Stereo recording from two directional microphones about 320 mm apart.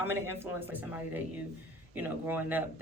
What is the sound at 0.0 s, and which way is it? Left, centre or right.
Speech, centre.